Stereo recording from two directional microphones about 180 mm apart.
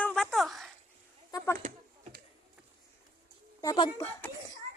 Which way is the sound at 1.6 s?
50° right (ahead or behind).